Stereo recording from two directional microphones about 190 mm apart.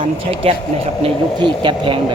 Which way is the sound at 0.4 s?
30° right (ahead or behind).